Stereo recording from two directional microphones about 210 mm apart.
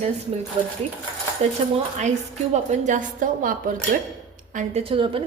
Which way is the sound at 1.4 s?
30° right (ahead or behind).